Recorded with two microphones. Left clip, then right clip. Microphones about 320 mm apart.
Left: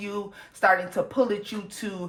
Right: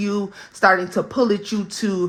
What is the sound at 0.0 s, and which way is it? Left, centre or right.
Speech, right.